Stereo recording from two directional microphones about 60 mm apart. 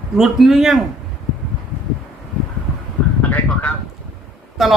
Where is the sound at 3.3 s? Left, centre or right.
Left.